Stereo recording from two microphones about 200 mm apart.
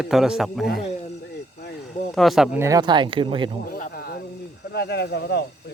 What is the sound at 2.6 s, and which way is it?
Speech, 20° right (ahead or behind).